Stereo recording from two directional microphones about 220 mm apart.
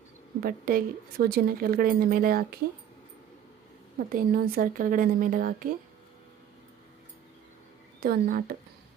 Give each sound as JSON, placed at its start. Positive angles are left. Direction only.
{"t": 0.4, "sound": "speech", "side_deg": -40}
{"t": 4.1, "sound": "speech", "side_deg": -40}
{"t": 8.0, "sound": "speech", "side_deg": -40}